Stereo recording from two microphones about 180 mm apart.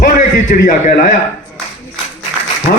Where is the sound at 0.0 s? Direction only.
45° left (ahead or behind).